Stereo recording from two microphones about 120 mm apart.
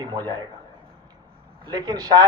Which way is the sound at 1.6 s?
35° right (ahead or behind).